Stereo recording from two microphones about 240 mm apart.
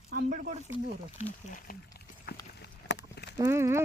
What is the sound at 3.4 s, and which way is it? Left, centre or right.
Speech, centre.